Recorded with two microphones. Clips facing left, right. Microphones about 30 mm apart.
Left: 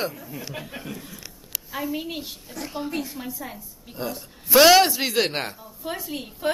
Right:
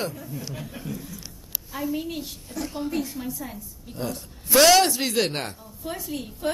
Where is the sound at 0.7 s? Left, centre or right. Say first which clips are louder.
Right 1 dB; left.